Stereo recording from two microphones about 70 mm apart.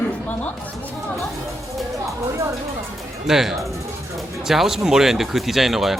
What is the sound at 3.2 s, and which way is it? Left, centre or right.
Speech, centre.